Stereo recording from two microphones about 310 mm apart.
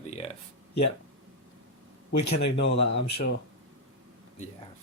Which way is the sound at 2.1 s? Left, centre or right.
Left.